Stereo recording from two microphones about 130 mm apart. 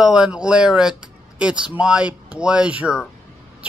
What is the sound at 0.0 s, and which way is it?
A man's voice, 5° right (ahead or behind).